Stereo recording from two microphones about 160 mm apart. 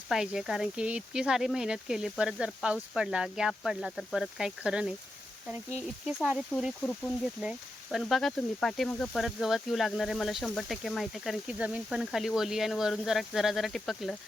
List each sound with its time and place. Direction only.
0.1 s speech: 5° right (ahead or behind)
6.1 s speech: 5° right (ahead or behind)
7.4 s speech: centre (ahead or behind)